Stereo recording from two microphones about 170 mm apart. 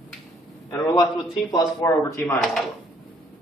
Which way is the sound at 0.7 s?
20° left (ahead or behind).